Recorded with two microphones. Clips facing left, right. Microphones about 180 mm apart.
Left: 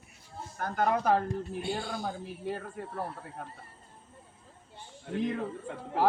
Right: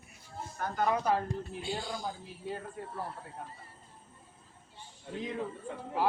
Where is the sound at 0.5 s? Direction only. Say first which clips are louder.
Left 2 dB; 55° left (ahead or behind).